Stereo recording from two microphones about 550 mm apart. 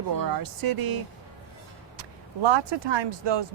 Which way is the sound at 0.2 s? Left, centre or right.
Right.